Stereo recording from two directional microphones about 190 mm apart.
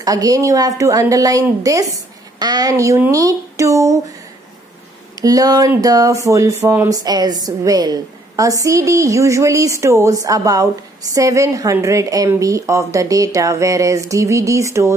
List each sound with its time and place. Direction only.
0.0 s a woman's voice: 20° right (ahead or behind)
5.2 s a woman's voice: 20° right (ahead or behind)